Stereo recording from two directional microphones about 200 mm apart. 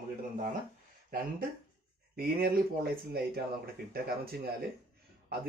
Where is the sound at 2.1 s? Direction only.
50° right (ahead or behind).